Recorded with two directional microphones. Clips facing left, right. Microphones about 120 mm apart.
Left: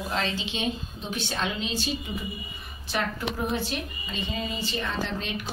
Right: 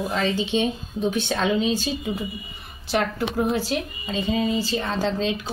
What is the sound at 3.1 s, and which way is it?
A woman's voice, 90° right.